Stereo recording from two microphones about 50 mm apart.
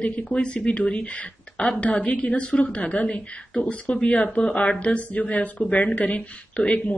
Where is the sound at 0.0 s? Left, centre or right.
Left.